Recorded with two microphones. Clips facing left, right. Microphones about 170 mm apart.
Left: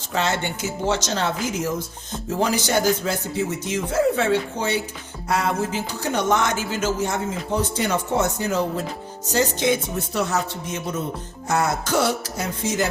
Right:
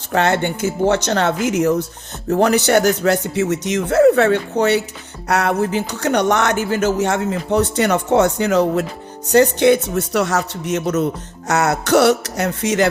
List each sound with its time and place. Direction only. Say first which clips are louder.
0.1 s speech: right 7 dB; 60° right (ahead or behind); by 12.9 s 80° right